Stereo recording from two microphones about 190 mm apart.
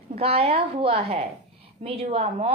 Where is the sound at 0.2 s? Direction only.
30° right (ahead or behind).